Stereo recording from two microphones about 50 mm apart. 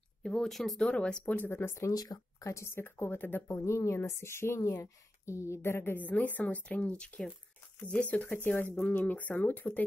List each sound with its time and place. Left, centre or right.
0.2 s speech: centre
0.7 s speech: centre
1.2 s a woman's voice: left
1.5 s a woman's voice: left
2.4 s a woman's voice: left
2.7 s a woman's voice: left
3.4 s a woman's voice: left
5.9 s a woman's voice: left